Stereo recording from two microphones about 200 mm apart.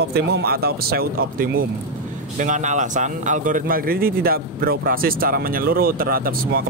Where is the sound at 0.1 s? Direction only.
50° right (ahead or behind).